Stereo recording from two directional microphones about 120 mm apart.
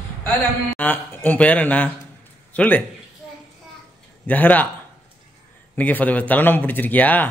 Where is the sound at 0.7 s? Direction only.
15° left (ahead or behind).